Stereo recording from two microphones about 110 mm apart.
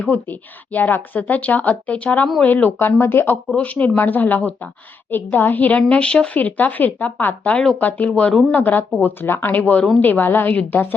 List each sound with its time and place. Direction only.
0.0 s a woman's voice: 15° left (ahead or behind)
8.5 s a woman's voice: 15° left (ahead or behind)